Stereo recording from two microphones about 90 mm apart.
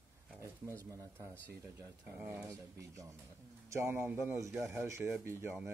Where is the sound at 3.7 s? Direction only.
30° right (ahead or behind).